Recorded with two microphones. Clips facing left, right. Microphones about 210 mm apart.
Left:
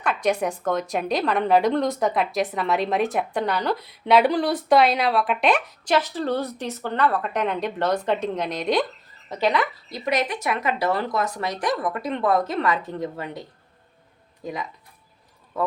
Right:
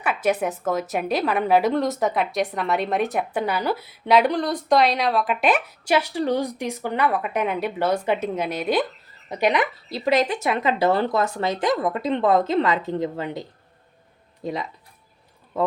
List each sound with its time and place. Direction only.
0.0 s a woman's voice: 5° right (ahead or behind)
9.3 s speech: 15° right (ahead or behind)
9.9 s speech: 30° right (ahead or behind)
14.4 s speech: 25° right (ahead or behind)